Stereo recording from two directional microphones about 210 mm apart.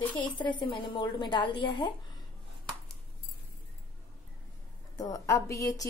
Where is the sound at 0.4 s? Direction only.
20° left (ahead or behind).